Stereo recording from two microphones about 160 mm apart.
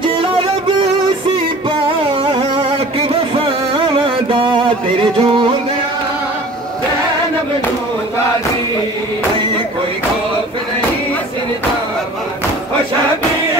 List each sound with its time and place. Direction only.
0.2 s music: 35° right (ahead or behind)
2.3 s music: 30° right (ahead or behind)